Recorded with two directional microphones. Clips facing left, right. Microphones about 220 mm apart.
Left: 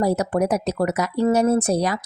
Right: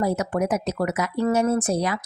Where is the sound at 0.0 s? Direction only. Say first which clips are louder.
Left 3 dB; 35° left (ahead or behind).